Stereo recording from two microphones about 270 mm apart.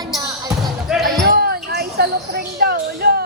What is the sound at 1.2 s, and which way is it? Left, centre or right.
Basketball bounce, right.